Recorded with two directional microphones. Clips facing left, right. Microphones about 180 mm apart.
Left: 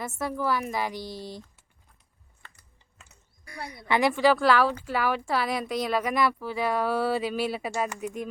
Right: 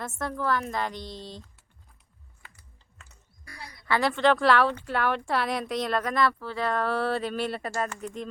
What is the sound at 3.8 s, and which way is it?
A woman's voice, 15° left (ahead or behind).